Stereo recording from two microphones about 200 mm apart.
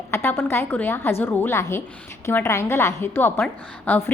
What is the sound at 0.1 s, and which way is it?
A woman's voice, 10° left (ahead or behind).